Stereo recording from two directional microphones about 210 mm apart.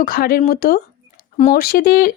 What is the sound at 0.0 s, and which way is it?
Speech, 45° left (ahead or behind).